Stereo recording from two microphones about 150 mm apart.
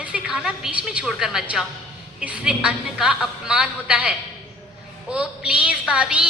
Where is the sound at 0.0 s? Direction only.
5° right (ahead or behind).